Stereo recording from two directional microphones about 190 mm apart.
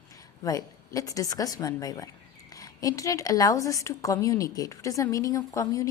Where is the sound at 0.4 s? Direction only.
15° left (ahead or behind).